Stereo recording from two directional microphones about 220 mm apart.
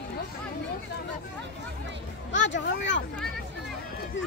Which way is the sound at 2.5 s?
55° left (ahead or behind).